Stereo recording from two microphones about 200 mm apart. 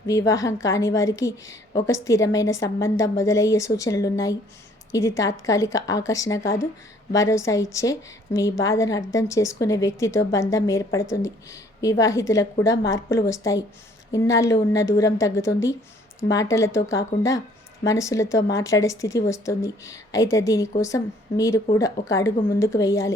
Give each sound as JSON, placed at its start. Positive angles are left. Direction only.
{"t": 0.1, "sound": "a woman's voice", "side_deg": 15}